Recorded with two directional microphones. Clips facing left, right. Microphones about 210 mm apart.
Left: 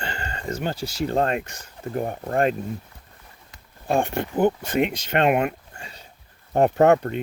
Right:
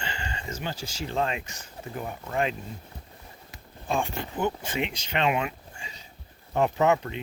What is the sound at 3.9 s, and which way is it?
Speech, 60° left (ahead or behind).